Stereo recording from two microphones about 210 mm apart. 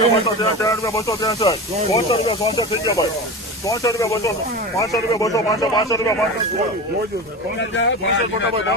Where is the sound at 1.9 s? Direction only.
30° left (ahead or behind).